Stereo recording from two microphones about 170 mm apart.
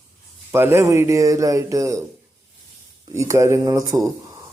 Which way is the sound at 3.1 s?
15° right (ahead or behind).